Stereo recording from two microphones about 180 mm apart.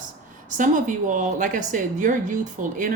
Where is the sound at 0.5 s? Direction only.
45° right (ahead or behind).